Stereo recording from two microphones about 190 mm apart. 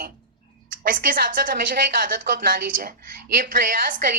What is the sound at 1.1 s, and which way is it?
A woman's voice, 50° right (ahead or behind).